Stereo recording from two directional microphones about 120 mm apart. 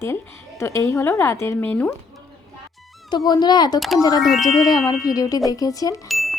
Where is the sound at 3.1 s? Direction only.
35° left (ahead or behind).